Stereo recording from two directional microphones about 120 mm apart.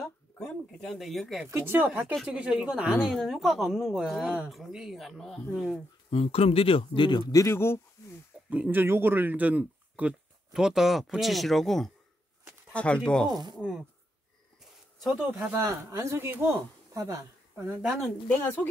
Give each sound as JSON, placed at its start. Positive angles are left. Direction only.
{"t": 0.4, "sound": "a woman's voice", "side_deg": 0}
{"t": 1.5, "sound": "a woman's voice", "side_deg": -15}
{"t": 6.0, "sound": "speech", "side_deg": 55}
{"t": 7.3, "sound": "speech", "side_deg": 20}
{"t": 8.5, "sound": "speech", "side_deg": -15}
{"t": 13.6, "sound": "a woman's voice", "side_deg": -5}
{"t": 14.6, "sound": "a sound", "side_deg": -5}
{"t": 15.5, "sound": "speech", "side_deg": -25}